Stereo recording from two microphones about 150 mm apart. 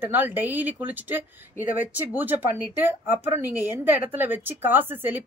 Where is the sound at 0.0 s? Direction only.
15° right (ahead or behind).